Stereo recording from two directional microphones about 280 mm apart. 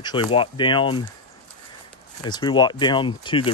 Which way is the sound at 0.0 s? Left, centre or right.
Centre.